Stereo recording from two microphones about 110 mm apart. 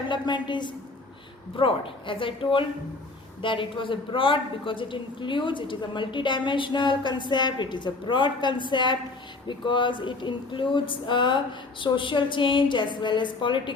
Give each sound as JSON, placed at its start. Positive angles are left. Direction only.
{"t": 0.1, "sound": "a woman's voice", "side_deg": 45}